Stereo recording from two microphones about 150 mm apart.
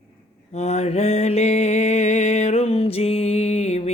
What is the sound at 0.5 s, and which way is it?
Mantra, 45° left (ahead or behind).